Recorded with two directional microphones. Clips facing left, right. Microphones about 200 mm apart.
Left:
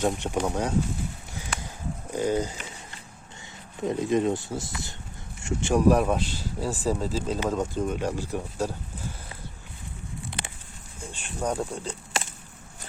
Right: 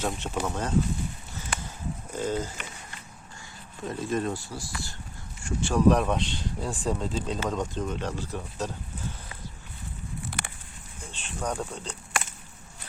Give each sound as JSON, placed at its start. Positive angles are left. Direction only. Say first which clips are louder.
{"t": 0.0, "sound": "speech", "louder": "left 4 dB", "side_deg": 15}
{"t": 1.5, "sound": "livestock", "louder": "even", "side_deg": 0}
{"t": 2.1, "sound": "speech", "louder": "left 4 dB", "side_deg": 15}
{"t": 3.8, "sound": "speech", "louder": "left 5 dB", "side_deg": 20}
{"t": 5.9, "sound": "speech", "louder": "left 2 dB", "side_deg": 5}
{"t": 11.1, "sound": "speech", "louder": "left 3 dB", "side_deg": 10}
{"t": 12.1, "sound": "chop", "louder": "even", "side_deg": 25}